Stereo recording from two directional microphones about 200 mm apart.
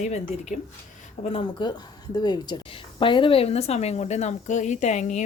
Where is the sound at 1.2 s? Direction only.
25° left (ahead or behind).